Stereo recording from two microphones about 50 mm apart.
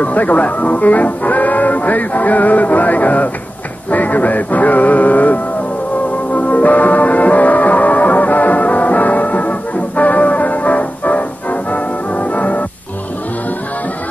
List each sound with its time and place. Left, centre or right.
0.0 s speech: left
6.3 s music: left